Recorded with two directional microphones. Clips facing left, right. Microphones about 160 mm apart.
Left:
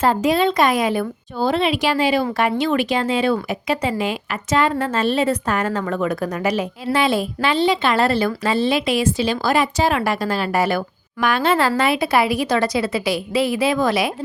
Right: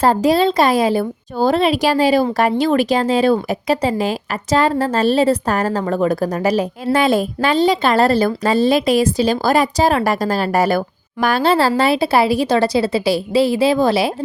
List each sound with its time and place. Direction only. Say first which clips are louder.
0.0 s a woman's voice: right 3 dB; 35° right (ahead or behind)